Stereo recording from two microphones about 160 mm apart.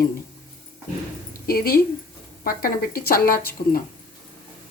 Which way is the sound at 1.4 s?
65° left (ahead or behind).